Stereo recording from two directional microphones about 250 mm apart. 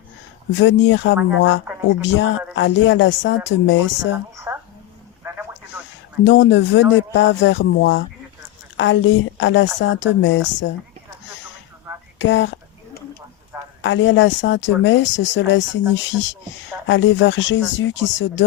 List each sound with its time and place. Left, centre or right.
0.5 s speech: left
4.5 s a sound: centre
6.2 s speech: left
12.2 s speech: left
13.8 s speech: left
16.8 s speech: left